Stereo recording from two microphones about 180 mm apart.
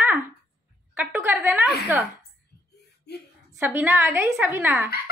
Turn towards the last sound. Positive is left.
turn(degrees=-10)  # may be behind; listen again after turning